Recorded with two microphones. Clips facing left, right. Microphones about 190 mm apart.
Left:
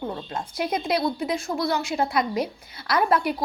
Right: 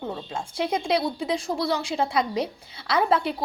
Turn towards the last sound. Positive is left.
turn(degrees=-25)  # may be behind; listen again after turning